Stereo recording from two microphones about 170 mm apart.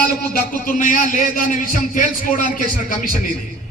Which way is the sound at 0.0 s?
50° left (ahead or behind).